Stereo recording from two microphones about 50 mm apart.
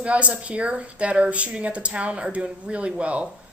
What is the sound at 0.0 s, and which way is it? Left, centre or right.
Speech, right.